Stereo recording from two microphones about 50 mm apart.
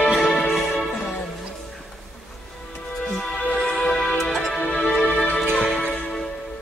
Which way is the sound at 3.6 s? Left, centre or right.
Centre.